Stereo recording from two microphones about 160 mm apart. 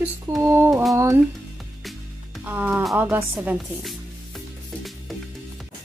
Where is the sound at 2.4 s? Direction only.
10° right (ahead or behind).